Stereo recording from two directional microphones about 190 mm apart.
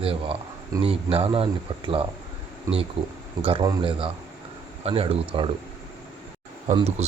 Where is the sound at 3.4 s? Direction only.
25° right (ahead or behind).